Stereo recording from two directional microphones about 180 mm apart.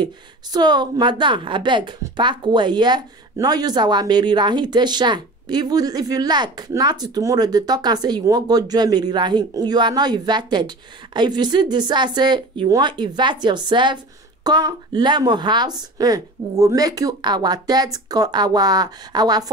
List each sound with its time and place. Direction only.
0.0 s a woman's voice: 25° right (ahead or behind)